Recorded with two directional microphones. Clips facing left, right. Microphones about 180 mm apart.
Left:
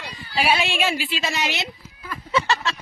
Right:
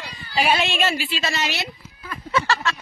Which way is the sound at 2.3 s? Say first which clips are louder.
Even; 25° left (ahead or behind).